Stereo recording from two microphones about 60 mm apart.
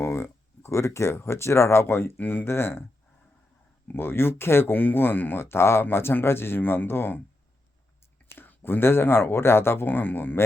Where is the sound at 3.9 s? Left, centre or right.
Left.